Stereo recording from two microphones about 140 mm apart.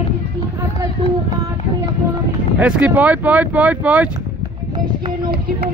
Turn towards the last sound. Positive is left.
turn(degrees=-10)  # may be behind; listen again after turning